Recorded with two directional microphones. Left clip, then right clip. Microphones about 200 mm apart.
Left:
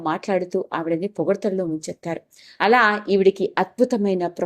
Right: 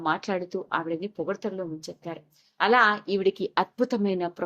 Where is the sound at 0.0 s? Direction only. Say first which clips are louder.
Left 5 dB; 20° left (ahead or behind).